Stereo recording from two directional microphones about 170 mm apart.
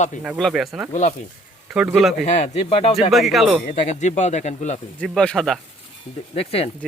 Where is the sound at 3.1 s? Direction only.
Centre (ahead or behind).